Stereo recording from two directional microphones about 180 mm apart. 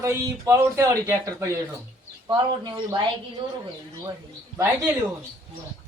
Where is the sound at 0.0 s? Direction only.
15° right (ahead or behind).